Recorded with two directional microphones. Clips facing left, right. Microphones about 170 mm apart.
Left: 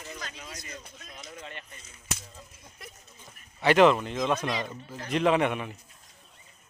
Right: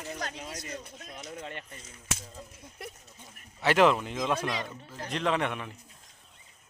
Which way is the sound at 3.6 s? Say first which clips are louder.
Left 3 dB; centre (ahead or behind).